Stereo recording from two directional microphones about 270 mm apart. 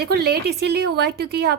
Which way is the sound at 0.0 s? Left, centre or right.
Right.